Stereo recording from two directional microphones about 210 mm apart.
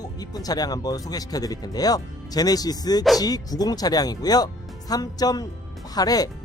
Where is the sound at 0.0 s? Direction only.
20° left (ahead or behind).